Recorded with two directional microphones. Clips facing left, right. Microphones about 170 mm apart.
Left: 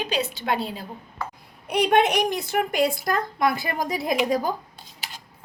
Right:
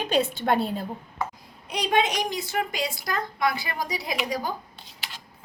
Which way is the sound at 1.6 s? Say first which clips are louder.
Left 5 dB; 65° left (ahead or behind).